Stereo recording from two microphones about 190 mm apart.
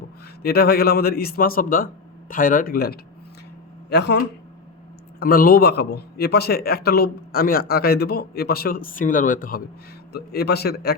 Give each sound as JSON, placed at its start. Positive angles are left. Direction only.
{"t": 0.4, "sound": "a man's voice", "side_deg": 55}
{"t": 5.2, "sound": "a man's voice", "side_deg": 50}